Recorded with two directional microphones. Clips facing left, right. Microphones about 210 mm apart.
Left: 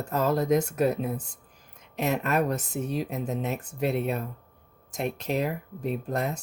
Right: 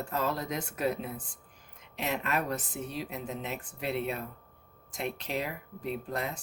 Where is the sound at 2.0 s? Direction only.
45° left (ahead or behind).